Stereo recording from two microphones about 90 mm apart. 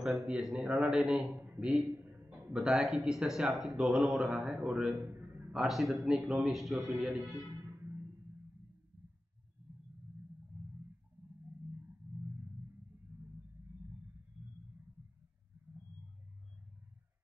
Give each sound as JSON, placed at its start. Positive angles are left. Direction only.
{"t": 0.3, "sound": "a man's voice", "side_deg": -5}
{"t": 1.3, "sound": "a man's voice", "side_deg": -20}
{"t": 1.7, "sound": "a sound", "side_deg": -15}
{"t": 2.5, "sound": "a man's voice", "side_deg": 0}
{"t": 5.5, "sound": "a man's voice", "side_deg": -5}
{"t": 6.1, "sound": "a man's voice", "side_deg": -10}
{"t": 7.6, "sound": "music", "side_deg": -25}